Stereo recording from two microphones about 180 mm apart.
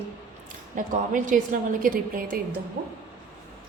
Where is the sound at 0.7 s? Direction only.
45° right (ahead or behind).